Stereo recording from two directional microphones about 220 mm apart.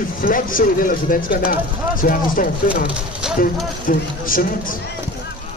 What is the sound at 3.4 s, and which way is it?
Speech, 40° left (ahead or behind).